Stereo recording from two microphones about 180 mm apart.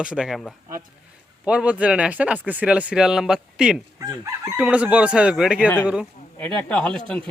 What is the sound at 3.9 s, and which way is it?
Speech, 15° right (ahead or behind).